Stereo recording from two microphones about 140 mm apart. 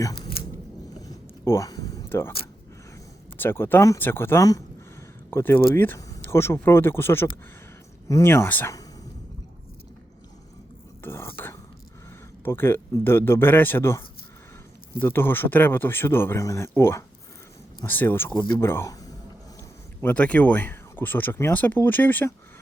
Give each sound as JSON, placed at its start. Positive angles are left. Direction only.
{"t": 1.0, "sound": "vehicle", "side_deg": 25}
{"t": 3.3, "sound": "speech", "side_deg": 15}
{"t": 11.0, "sound": "cutlery", "side_deg": 15}
{"t": 12.5, "sound": "speech", "side_deg": 15}
{"t": 20.0, "sound": "speech", "side_deg": 10}